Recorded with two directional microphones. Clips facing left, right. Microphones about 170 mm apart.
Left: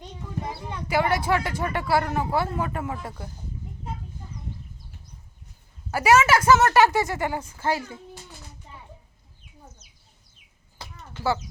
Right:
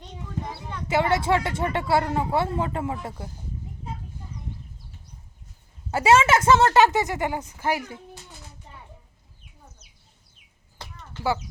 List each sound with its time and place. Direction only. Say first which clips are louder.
0.9 s a woman's voice: right 1 dB; 25° right (ahead or behind)
5.9 s a woman's voice: even; 25° right (ahead or behind)